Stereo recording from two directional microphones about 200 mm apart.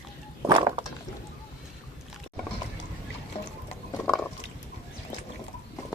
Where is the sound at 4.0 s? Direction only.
5° left (ahead or behind).